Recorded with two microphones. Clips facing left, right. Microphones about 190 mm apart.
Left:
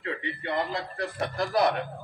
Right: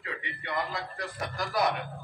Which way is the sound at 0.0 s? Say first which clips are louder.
Left 7 dB; 35° left (ahead or behind).